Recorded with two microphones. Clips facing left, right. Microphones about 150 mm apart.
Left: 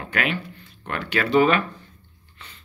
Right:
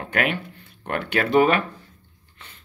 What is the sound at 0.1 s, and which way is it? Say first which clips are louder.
Speech: right 2 dB; 55° right (ahead or behind).